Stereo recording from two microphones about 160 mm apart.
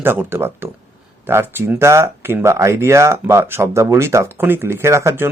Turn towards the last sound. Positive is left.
turn(degrees=-15)  # may be behind; listen again after turning